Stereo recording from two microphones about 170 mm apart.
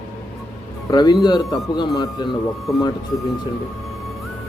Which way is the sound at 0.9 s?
25° left (ahead or behind).